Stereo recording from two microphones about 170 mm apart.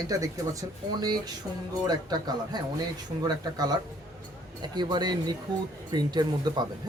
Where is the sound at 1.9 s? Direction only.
25° right (ahead or behind).